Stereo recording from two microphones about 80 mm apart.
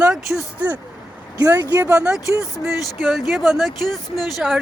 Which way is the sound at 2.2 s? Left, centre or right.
Left.